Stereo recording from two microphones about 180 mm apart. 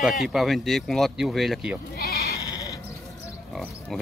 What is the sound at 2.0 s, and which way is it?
Bleat, 60° left (ahead or behind).